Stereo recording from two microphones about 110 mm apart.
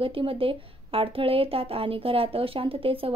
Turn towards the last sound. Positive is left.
turn(degrees=-55)  # may be behind; listen again after turning